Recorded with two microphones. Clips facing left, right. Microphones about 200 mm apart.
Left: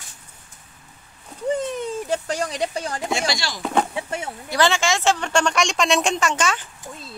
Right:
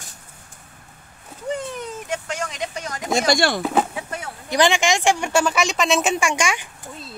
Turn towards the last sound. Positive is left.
turn(degrees=-10)  # may be behind; listen again after turning